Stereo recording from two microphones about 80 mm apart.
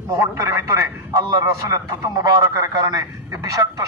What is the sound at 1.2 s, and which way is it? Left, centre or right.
A man's voice, right.